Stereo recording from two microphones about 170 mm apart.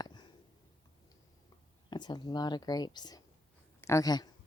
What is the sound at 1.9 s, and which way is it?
A woman's voice, 25° left (ahead or behind).